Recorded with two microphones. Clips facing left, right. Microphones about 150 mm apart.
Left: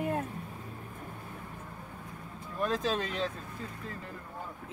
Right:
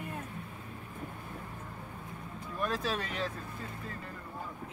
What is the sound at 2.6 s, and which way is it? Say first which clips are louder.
Speech: left 3 dB; 20° left (ahead or behind).